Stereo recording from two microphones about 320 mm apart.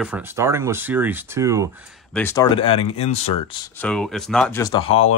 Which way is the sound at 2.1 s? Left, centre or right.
Centre.